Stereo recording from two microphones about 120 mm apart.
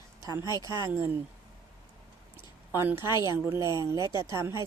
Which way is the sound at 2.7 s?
20° right (ahead or behind).